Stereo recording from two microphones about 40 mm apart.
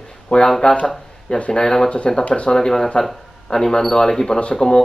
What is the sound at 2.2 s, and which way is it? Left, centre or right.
Speech, left.